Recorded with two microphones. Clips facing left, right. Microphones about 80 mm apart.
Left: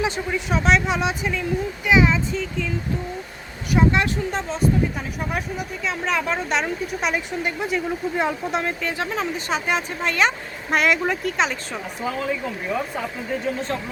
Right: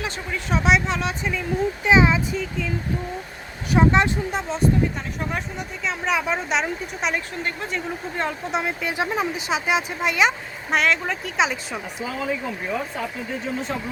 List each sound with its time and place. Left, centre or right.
0.5 s speech: centre
0.9 s speech: centre
1.8 s speech: right
2.1 s speech: centre
3.7 s speech: right
4.3 s speech: centre
8.5 s speech: centre